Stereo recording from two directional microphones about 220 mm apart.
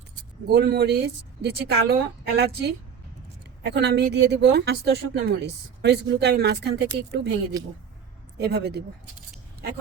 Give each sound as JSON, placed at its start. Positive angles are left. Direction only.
{"t": 0.5, "sound": "speech", "side_deg": -45}
{"t": 7.5, "sound": "speech", "side_deg": -15}
{"t": 8.4, "sound": "speech", "side_deg": -45}